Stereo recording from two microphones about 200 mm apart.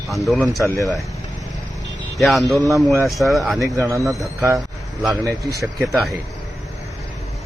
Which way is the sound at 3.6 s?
15° right (ahead or behind).